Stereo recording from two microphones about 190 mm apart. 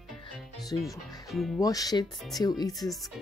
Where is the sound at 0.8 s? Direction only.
Centre (ahead or behind).